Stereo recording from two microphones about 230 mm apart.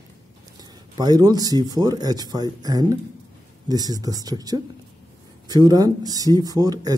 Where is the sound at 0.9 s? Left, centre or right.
Centre.